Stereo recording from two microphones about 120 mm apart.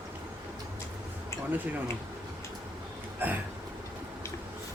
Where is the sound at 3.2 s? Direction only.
15° right (ahead or behind).